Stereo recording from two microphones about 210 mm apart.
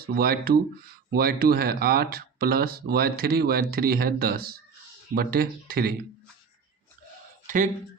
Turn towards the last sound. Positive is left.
turn(degrees=-35)  # may be behind; listen again after turning